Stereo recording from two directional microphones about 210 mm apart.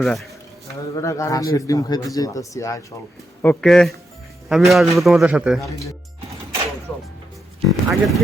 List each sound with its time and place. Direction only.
0.0 s a man's voice: centre (ahead or behind)
0.9 s a man's voice: 15° left (ahead or behind); by 5.6 s 5° right (ahead or behind)
7.7 s a man's voice: centre (ahead or behind)